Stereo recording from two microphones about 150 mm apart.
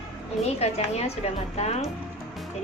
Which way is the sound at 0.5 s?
45° left (ahead or behind).